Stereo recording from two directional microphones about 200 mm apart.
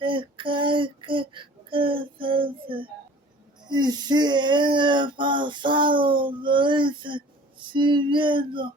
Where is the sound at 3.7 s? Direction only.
20° right (ahead or behind).